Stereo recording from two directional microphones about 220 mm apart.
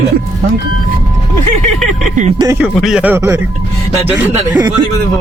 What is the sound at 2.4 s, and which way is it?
Speech, 10° right (ahead or behind).